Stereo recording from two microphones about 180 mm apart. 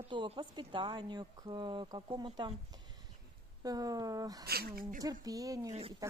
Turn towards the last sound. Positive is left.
turn(degrees=-20)  # may be behind; listen again after turning